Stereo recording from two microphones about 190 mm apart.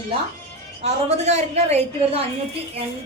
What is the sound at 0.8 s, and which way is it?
A woman's voice, 35° right (ahead or behind).